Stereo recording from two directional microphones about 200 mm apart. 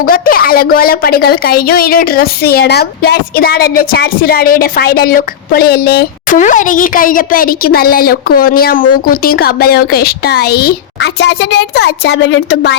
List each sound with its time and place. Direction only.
0.0 s a woman's voice: 45° left (ahead or behind)